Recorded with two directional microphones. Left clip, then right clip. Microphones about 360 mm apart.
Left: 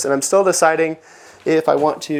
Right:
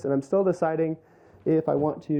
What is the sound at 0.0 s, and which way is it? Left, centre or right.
Speech, centre.